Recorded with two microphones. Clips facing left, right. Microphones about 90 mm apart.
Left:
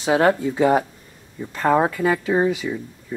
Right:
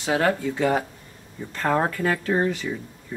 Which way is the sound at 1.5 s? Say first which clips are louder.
Left 5 dB; 10° left (ahead or behind).